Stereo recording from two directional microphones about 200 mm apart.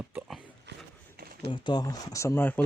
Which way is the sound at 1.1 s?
50° right (ahead or behind).